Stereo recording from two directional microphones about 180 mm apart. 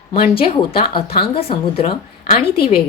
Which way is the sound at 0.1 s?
30° left (ahead or behind).